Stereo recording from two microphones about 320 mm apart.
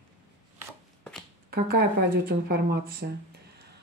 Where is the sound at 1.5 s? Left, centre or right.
Right.